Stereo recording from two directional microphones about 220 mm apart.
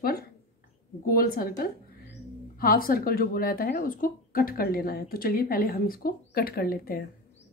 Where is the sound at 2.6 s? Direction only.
40° left (ahead or behind).